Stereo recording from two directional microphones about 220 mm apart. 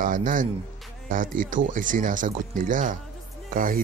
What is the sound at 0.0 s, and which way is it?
Speech, 35° right (ahead or behind).